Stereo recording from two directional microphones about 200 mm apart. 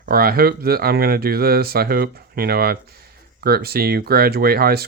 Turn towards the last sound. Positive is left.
turn(degrees=-50)  # may be behind; listen again after turning